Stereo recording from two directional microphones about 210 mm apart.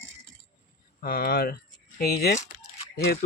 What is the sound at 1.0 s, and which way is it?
Speech, 50° left (ahead or behind).